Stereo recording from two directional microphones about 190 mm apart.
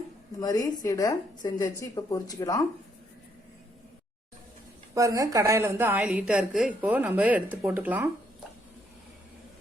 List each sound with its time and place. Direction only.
0.3 s speech: 20° left (ahead or behind)
4.9 s a woman's voice: 15° right (ahead or behind)